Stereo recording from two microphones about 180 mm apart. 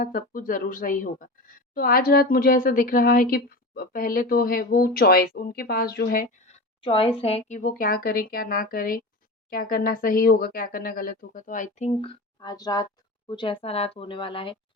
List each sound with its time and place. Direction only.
0.0 s a woman's voice: 50° left (ahead or behind)
6.8 s speech: 30° left (ahead or behind)
11.9 s speech: 25° left (ahead or behind)